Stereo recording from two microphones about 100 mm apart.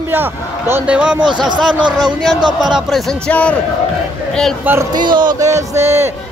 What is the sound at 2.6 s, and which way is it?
Speech, centre (ahead or behind).